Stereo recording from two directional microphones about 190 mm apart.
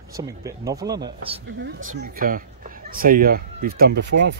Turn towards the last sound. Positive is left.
turn(degrees=-65)  # may be behind; listen again after turning